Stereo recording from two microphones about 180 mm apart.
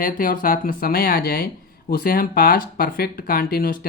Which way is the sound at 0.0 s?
50° left (ahead or behind).